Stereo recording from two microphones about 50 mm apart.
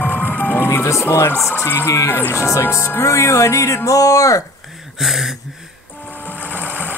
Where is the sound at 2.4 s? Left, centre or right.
Left.